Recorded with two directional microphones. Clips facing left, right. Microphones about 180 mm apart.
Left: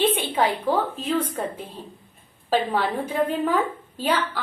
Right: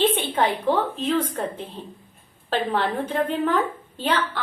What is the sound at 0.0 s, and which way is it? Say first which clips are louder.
A woman's voice: even; 10° left (ahead or behind).